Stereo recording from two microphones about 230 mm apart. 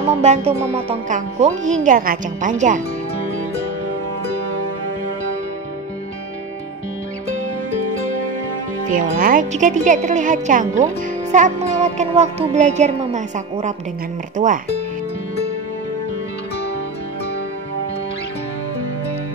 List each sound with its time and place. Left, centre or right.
0.2 s speech: right
8.8 s speech: right